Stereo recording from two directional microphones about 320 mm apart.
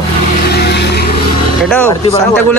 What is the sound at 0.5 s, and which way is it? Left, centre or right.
Vehicle, left.